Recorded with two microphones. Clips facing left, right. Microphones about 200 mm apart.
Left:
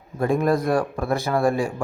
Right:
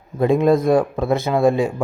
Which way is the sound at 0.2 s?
20° right (ahead or behind).